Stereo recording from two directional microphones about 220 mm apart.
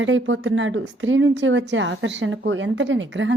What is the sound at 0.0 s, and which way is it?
A woman's voice, 60° right (ahead or behind).